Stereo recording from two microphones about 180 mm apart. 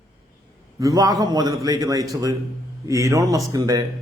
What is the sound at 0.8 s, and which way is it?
A man's voice, 20° right (ahead or behind).